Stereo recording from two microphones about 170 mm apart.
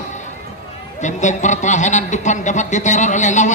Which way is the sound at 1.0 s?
45° left (ahead or behind).